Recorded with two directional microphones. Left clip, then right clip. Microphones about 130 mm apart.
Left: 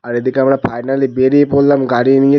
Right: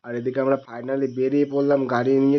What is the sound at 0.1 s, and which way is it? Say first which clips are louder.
Speech: left 9 dB; 55° left (ahead or behind).